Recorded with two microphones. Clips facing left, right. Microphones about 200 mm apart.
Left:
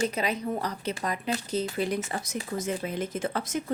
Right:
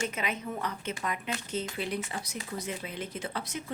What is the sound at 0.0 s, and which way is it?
Speech, 35° left (ahead or behind).